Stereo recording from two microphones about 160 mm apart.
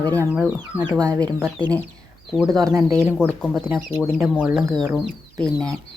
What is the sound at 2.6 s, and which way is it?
Speech, 20° right (ahead or behind).